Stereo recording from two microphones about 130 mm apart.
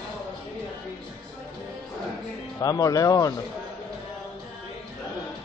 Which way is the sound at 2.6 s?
30° left (ahead or behind).